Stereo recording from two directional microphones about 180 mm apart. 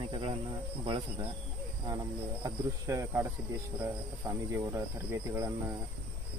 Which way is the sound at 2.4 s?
15° right (ahead or behind).